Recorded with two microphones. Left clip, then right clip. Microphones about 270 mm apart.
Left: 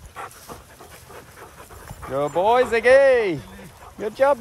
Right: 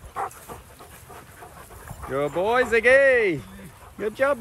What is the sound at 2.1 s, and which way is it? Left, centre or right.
Speech, centre.